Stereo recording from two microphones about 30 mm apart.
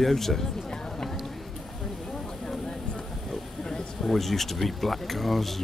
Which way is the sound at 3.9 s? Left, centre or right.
Centre.